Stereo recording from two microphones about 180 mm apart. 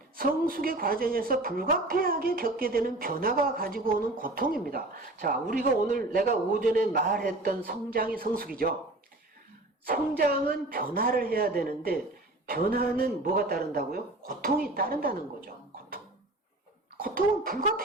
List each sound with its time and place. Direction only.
0.2 s a woman's voice: 55° right (ahead or behind)
9.8 s speech: 55° right (ahead or behind)
17.0 s a woman's voice: 55° right (ahead or behind)